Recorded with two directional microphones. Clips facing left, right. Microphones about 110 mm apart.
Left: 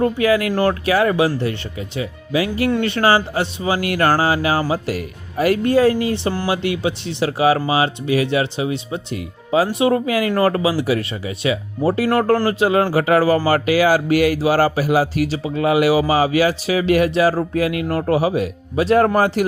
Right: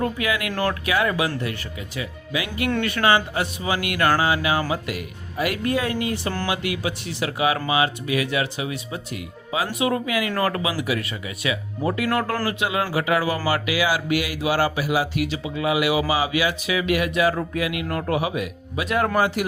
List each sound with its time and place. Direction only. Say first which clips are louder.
0.0 s speech: left 8 dB; 35° left (ahead or behind)